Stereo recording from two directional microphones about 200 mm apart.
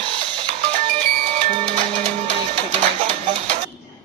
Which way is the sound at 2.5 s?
30° right (ahead or behind).